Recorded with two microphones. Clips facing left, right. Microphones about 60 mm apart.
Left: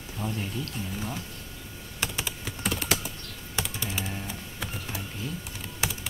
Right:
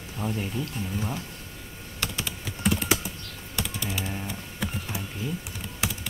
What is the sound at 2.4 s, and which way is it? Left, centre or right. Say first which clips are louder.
Typing: right 7 dB; centre.